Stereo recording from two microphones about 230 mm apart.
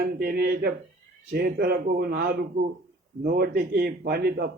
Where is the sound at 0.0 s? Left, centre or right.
Right.